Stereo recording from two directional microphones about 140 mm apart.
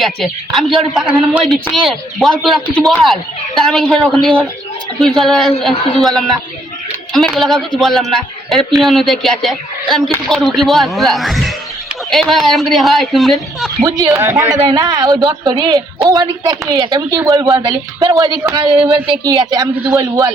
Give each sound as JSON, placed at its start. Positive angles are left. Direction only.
{"t": 0.0, "sound": "a man's voice", "side_deg": 0}
{"t": 13.8, "sound": "speech", "side_deg": -25}